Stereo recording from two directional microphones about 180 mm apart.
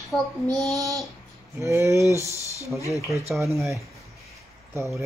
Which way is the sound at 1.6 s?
15° right (ahead or behind).